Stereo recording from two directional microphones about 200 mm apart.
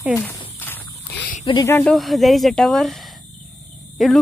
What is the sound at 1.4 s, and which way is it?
Speech, 25° left (ahead or behind).